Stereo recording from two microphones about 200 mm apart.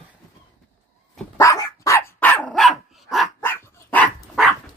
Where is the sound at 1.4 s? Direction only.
15° left (ahead or behind); by 3.2 s centre (ahead or behind).